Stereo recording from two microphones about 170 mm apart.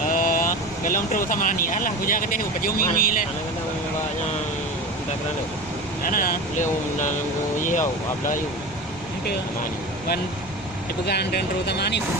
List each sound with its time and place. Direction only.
0.0 s speech: 50° left (ahead or behind)
6.0 s speech: 55° left (ahead or behind)
11.0 s speech: 75° left (ahead or behind)